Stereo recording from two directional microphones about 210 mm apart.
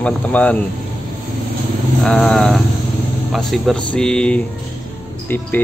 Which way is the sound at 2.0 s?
Centre (ahead or behind).